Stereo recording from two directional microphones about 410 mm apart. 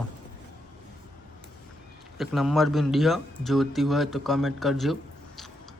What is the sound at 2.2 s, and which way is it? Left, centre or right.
Speech, centre.